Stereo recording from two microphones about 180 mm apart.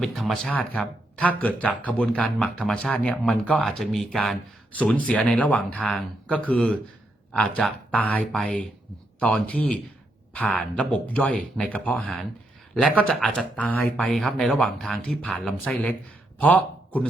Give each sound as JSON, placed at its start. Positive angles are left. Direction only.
{"t": 0.0, "sound": "speech", "side_deg": 0}